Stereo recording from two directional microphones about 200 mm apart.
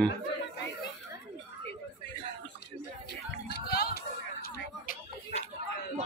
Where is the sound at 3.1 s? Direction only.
55° left (ahead or behind).